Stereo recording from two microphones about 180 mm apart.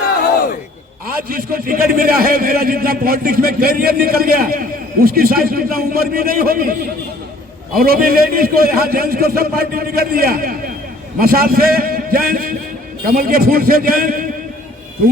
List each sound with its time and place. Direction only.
1.3 s a man's voice: 55° right (ahead or behind)
7.8 s a man's voice: 55° right (ahead or behind)